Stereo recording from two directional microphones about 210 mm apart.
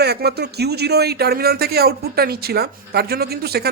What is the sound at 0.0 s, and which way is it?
Speech, 50° right (ahead or behind).